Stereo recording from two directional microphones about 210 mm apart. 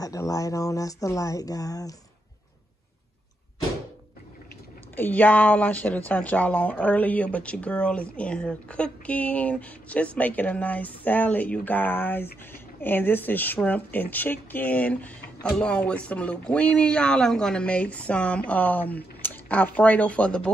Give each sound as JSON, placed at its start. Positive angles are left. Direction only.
{"t": 0.0, "sound": "speech", "side_deg": 15}
{"t": 4.9, "sound": "speech", "side_deg": 10}